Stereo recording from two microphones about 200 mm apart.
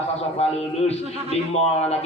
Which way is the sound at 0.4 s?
30° left (ahead or behind).